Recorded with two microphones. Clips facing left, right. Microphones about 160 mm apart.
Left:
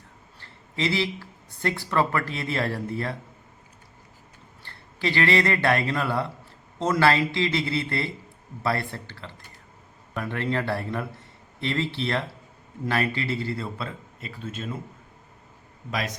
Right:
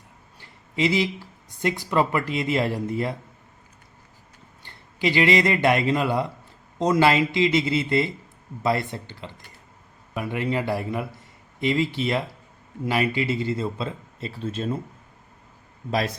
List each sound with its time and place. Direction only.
0.3 s speech: 15° right (ahead or behind)
4.6 s a man's voice: 15° right (ahead or behind); by 14.8 s 30° right (ahead or behind)
15.9 s a man's voice: 30° right (ahead or behind)